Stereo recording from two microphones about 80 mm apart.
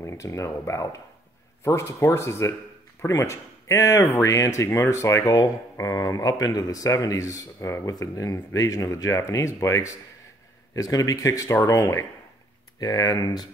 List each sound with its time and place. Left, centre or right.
0.0 s speech: left
12.8 s speech: left